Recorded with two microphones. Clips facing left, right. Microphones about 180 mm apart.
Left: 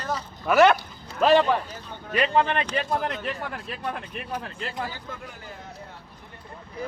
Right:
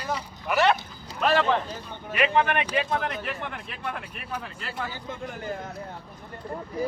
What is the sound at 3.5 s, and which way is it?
Speech, 40° left (ahead or behind).